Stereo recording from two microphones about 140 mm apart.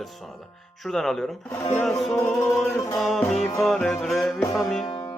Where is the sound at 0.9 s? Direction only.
5° left (ahead or behind).